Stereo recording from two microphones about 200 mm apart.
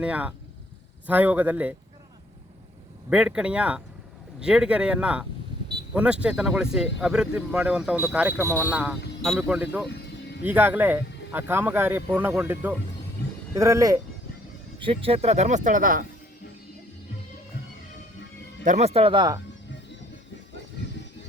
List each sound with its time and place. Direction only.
0.0 s speech: 5° right (ahead or behind)
3.1 s speech: 5° right (ahead or behind)
9.9 s a sound: 55° left (ahead or behind)
10.4 s speech: 10° right (ahead or behind)
14.8 s speech: 25° right (ahead or behind); by 16.0 s 45° right (ahead or behind)
18.6 s speech: 35° right (ahead or behind)